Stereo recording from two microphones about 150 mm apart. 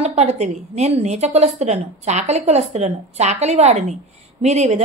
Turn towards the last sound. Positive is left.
turn(degrees=-50)  # may be behind; listen again after turning